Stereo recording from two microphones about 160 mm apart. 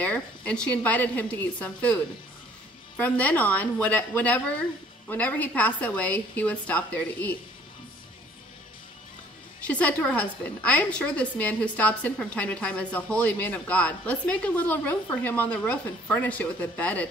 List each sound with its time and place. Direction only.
0.0 s a woman's voice: 10° left (ahead or behind)
3.0 s a woman's voice: 10° left (ahead or behind)
9.6 s a woman's voice: 10° left (ahead or behind)